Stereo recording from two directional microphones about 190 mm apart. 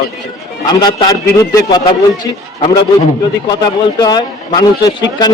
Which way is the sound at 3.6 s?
20° left (ahead or behind).